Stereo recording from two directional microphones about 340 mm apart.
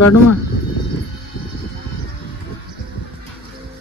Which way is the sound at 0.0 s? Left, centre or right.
Left.